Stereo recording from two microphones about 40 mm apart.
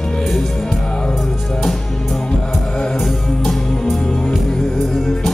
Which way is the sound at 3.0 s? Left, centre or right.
Centre.